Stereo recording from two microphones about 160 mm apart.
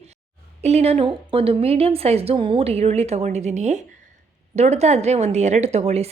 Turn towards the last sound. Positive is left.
turn(degrees=-40)  # may be behind; listen again after turning